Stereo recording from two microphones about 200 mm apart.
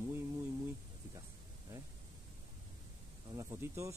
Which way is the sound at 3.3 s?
15° right (ahead or behind).